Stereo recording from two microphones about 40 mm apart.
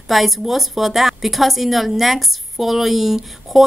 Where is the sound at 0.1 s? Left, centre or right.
Centre.